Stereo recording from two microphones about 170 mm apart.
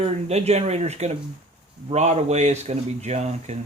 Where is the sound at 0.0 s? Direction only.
40° right (ahead or behind).